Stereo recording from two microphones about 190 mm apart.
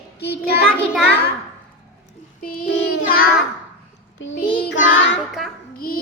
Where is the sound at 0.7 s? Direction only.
Centre (ahead or behind).